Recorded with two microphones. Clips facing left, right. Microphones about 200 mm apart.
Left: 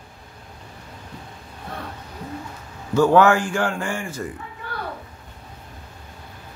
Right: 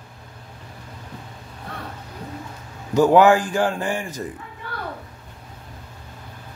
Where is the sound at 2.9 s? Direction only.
15° right (ahead or behind).